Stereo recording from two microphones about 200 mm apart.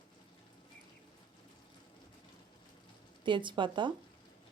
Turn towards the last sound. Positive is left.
turn(degrees=-25)  # may be behind; listen again after turning